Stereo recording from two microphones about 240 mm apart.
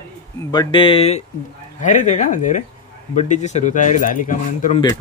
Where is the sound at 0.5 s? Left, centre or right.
Centre.